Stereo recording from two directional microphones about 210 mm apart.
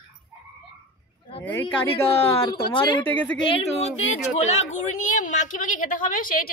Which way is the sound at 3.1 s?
10° left (ahead or behind).